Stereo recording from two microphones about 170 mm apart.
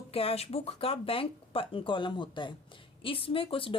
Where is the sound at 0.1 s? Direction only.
35° left (ahead or behind).